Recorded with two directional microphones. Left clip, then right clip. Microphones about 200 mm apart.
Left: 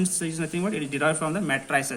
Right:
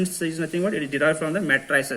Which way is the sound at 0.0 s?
25° left (ahead or behind).